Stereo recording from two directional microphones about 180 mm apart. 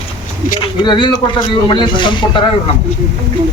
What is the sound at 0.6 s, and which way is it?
Speech, 25° left (ahead or behind).